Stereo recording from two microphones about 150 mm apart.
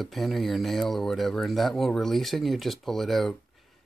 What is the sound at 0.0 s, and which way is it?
Speech, centre (ahead or behind).